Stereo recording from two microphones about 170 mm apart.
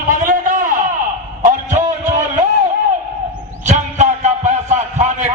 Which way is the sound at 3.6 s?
45° right (ahead or behind).